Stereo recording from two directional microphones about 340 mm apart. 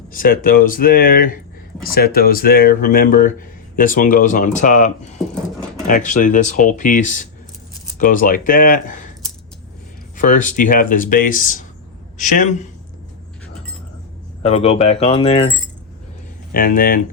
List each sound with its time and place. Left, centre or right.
0.1 s speech: left
10.2 s speech: left
14.4 s speech: centre
16.5 s speech: left